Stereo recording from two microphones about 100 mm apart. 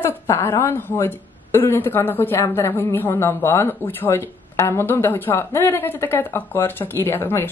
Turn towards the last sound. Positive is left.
turn(degrees=25)  # may be behind; listen again after turning